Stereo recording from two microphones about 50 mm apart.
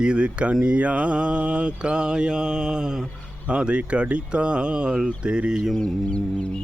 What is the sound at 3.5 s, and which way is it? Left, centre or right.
Speech, right.